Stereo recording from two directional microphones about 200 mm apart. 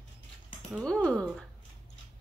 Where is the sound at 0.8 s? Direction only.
5° left (ahead or behind).